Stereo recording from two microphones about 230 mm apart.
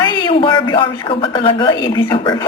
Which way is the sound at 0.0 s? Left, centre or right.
Centre.